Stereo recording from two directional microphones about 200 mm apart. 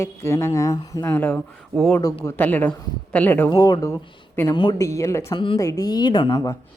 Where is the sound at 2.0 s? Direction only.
15° left (ahead or behind).